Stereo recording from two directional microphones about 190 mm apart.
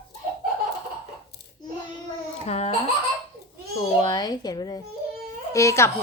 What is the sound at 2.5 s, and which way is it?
Speech, 35° left (ahead or behind).